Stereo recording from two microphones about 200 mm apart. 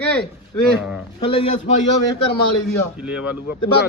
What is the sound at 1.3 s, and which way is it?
Speech, 25° left (ahead or behind).